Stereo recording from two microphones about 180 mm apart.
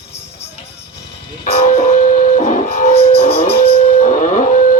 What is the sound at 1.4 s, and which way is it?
Music, 40° left (ahead or behind).